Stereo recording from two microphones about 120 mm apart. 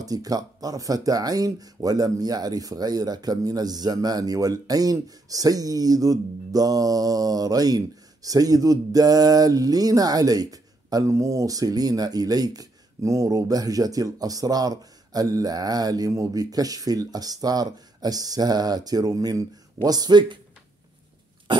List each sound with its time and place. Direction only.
0.0 s speech: 30° right (ahead or behind)